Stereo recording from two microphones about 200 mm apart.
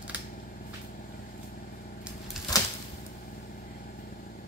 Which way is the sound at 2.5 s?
20° left (ahead or behind).